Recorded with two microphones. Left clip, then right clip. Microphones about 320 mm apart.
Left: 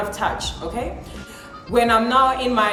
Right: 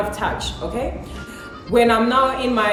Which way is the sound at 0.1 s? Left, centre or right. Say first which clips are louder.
Even; centre.